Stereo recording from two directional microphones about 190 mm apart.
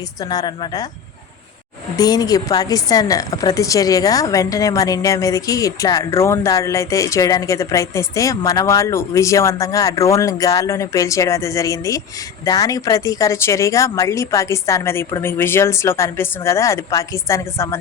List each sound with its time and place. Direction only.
0.2 s a woman's voice: 20° left (ahead or behind)
2.0 s speech: 20° left (ahead or behind)